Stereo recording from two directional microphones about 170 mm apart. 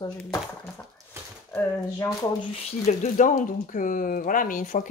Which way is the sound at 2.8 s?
50° left (ahead or behind).